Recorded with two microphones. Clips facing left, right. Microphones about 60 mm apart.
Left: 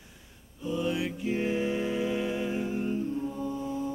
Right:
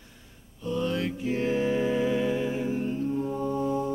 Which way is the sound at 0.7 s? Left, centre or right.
Centre.